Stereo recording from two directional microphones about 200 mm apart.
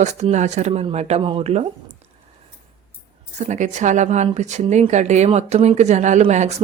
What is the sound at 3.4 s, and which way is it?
Speech, 35° right (ahead or behind).